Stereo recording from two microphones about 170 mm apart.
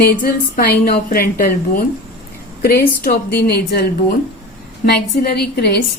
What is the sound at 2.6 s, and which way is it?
A woman's voice, 65° left (ahead or behind).